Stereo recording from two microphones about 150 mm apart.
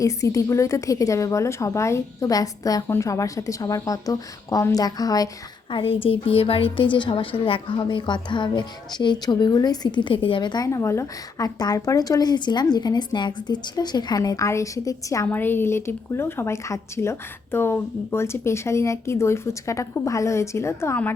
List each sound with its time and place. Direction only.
0.0 s a woman's voice: 20° left (ahead or behind)
5.7 s a woman's voice: 40° left (ahead or behind); by 21.1 s 15° left (ahead or behind)